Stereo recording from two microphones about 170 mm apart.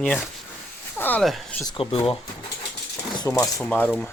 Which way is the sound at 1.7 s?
30° left (ahead or behind).